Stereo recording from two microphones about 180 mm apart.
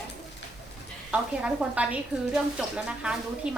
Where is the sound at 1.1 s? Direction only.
5° right (ahead or behind).